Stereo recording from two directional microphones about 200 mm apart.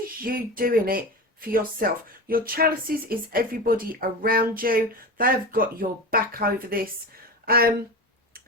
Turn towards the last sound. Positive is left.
turn(degrees=-50)  # may be behind; listen again after turning